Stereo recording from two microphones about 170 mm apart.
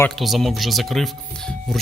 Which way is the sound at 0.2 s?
Centre (ahead or behind).